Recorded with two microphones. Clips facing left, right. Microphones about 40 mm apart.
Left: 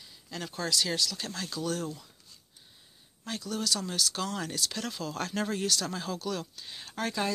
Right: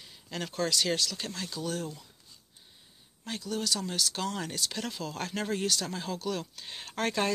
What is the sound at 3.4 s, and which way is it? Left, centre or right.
Speech, right.